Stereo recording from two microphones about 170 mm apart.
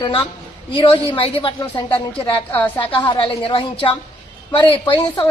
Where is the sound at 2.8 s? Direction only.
30° left (ahead or behind).